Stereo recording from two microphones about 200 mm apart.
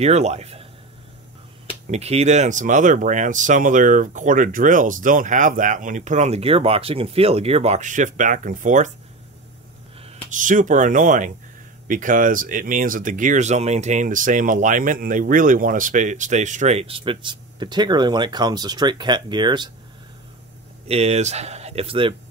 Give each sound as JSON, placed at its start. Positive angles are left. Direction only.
{"t": 0.0, "sound": "speech", "side_deg": -35}
{"t": 1.9, "sound": "speech", "side_deg": -30}
{"t": 10.0, "sound": "speech", "side_deg": -40}
{"t": 20.8, "sound": "speech", "side_deg": -30}